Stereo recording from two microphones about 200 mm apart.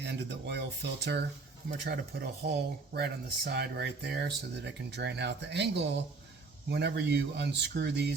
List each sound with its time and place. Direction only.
0.0 s speech: 60° right (ahead or behind)